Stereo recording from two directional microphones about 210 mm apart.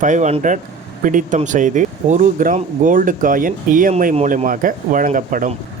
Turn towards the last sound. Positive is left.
turn(degrees=-40)  # may be behind; listen again after turning